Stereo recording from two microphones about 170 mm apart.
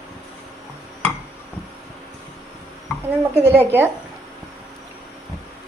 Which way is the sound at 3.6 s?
10° right (ahead or behind).